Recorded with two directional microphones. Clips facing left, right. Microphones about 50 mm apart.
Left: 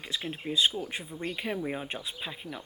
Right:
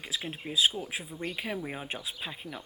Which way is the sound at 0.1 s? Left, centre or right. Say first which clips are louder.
Left 2 dB; centre.